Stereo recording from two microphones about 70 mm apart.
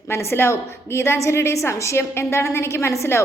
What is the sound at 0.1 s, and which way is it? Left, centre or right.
A woman's voice, left.